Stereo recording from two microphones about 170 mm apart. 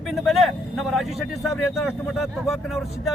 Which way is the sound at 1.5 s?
15° left (ahead or behind).